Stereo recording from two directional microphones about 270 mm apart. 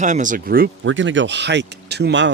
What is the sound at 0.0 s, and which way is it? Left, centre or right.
Speech, right.